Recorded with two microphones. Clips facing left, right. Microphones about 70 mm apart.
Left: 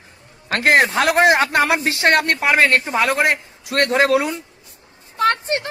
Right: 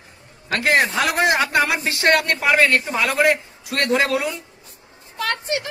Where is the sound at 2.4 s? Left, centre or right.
Left.